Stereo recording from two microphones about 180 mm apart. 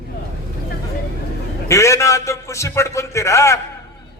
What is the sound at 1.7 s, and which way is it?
A man's voice, 15° left (ahead or behind).